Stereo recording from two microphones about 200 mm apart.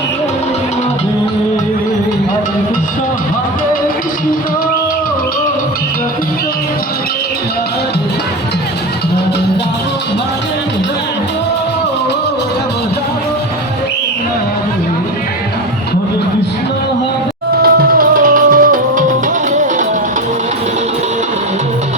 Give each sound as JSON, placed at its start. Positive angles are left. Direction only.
{"t": 17.6, "sound": "music", "side_deg": -45}